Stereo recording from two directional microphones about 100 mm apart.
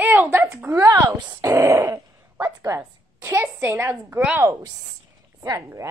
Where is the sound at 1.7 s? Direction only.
35° right (ahead or behind).